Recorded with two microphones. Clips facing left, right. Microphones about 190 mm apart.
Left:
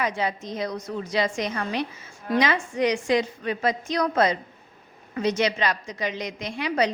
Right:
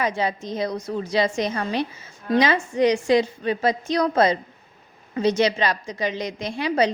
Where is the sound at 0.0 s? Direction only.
30° right (ahead or behind).